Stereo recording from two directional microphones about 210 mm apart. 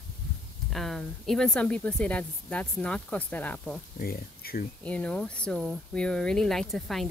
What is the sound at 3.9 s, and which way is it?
Speech, 45° left (ahead or behind).